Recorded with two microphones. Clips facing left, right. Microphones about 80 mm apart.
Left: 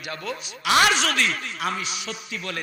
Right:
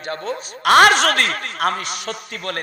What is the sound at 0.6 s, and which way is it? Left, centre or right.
A man's voice, right.